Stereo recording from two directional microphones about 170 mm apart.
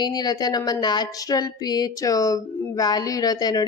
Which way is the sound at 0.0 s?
25° left (ahead or behind).